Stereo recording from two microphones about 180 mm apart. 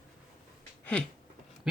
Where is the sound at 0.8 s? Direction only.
5° left (ahead or behind).